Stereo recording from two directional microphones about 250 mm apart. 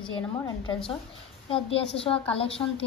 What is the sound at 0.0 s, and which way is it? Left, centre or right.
Speech, centre.